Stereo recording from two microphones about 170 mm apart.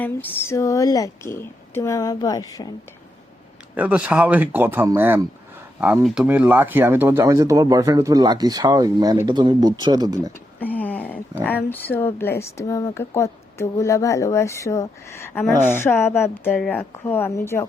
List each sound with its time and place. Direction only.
0.0 s speech: 10° left (ahead or behind)
3.8 s speech: 10° right (ahead or behind)
10.6 s a sound: 10° left (ahead or behind)
11.4 s speech: 10° left (ahead or behind)